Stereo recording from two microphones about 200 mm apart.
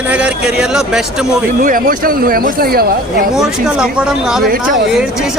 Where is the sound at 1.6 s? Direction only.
45° right (ahead or behind).